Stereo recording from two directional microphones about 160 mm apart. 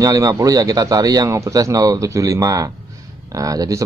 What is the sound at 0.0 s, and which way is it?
Speech, 20° right (ahead or behind).